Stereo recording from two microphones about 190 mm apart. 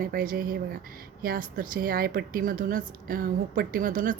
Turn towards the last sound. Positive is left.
turn(degrees=-45)  # may be behind; listen again after turning